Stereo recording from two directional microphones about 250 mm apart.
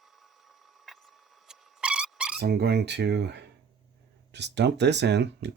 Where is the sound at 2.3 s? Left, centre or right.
Right.